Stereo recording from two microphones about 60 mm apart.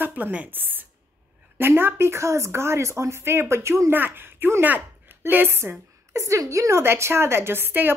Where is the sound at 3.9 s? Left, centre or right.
Right.